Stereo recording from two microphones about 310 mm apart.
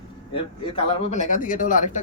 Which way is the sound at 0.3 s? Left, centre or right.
Centre.